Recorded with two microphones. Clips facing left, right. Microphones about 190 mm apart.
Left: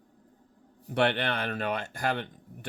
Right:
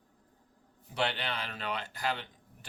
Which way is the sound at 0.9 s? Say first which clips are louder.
Left 7 dB; 60° left (ahead or behind).